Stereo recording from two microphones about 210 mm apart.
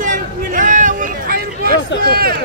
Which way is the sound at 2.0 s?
45° right (ahead or behind).